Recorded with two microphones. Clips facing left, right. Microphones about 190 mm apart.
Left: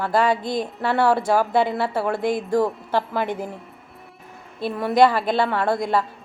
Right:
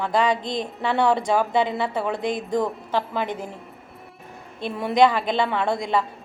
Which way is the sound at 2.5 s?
5° left (ahead or behind).